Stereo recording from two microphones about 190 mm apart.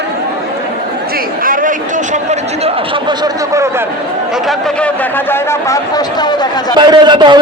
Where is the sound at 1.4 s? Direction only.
45° right (ahead or behind).